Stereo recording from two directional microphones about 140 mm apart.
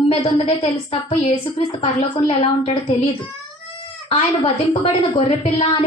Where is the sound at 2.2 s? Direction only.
45° left (ahead or behind).